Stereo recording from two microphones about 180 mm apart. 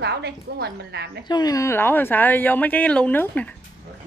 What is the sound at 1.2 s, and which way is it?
Speech, 20° left (ahead or behind).